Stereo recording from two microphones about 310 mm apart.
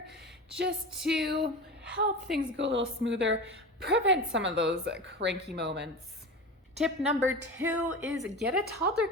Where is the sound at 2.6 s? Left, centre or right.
Right.